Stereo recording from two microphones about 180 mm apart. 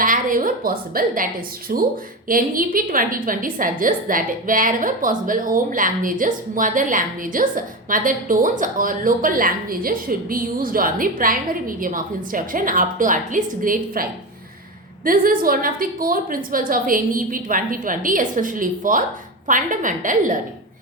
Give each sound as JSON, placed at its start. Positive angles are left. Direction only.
{"t": 0.0, "sound": "a woman's voice", "side_deg": -50}